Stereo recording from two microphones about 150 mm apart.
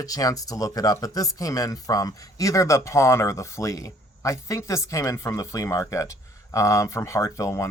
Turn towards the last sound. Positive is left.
turn(degrees=20)  # may be behind; listen again after turning